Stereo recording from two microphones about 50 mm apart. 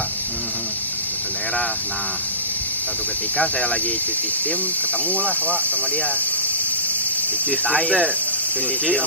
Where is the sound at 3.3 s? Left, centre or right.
Left.